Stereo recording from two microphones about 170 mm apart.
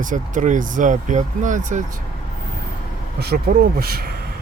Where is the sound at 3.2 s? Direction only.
65° right (ahead or behind).